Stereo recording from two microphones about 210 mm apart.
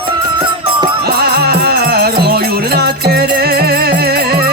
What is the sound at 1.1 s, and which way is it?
Music, 50° right (ahead or behind).